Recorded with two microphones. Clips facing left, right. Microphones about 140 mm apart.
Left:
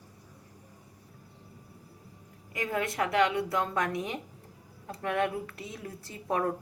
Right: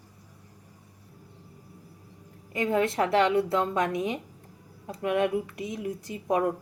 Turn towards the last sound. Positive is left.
turn(degrees=-15)  # may be behind; listen again after turning